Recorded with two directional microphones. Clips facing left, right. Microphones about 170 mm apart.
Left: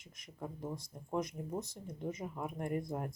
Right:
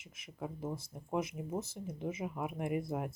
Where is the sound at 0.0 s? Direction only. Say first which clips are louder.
Right 2 dB; 5° right (ahead or behind).